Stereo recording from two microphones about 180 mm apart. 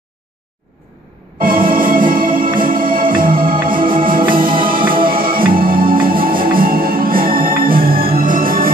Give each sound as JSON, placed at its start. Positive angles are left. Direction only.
{"t": 1.4, "sound": "music", "side_deg": -50}
{"t": 2.6, "sound": "organ", "side_deg": -50}
{"t": 3.2, "sound": "music", "side_deg": -50}